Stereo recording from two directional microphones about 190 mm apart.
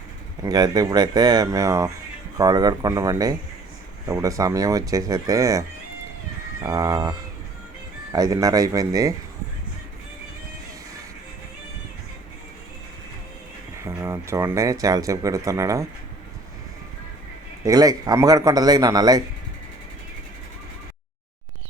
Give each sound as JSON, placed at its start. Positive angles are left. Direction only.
{"t": 0.4, "sound": "speech", "side_deg": -20}
{"t": 13.8, "sound": "speech", "side_deg": -15}
{"t": 17.7, "sound": "speech", "side_deg": -20}